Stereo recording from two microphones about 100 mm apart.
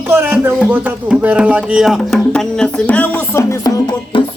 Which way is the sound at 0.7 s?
15° right (ahead or behind).